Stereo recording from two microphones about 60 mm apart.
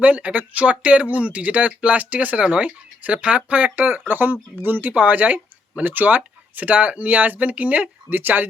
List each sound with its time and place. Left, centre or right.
0.0 s speech: right